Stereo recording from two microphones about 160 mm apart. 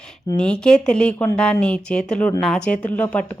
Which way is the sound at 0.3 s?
5° left (ahead or behind).